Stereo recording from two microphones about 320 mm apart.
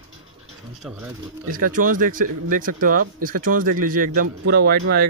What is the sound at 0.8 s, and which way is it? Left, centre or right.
Speech, centre.